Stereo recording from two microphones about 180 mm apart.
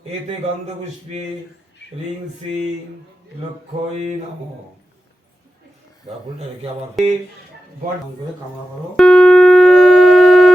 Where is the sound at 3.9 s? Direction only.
35° right (ahead or behind).